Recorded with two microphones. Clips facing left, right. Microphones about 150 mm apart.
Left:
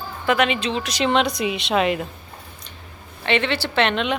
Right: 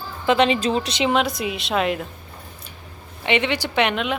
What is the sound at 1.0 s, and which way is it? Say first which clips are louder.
A woman's voice: left 3 dB; 5° right (ahead or behind).